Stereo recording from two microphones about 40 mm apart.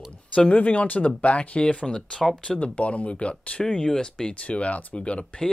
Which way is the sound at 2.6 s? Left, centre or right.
Left.